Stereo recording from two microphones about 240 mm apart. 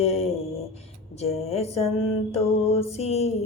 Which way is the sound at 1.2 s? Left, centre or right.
Left.